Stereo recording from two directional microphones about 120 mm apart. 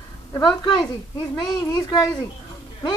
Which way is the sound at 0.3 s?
35° left (ahead or behind).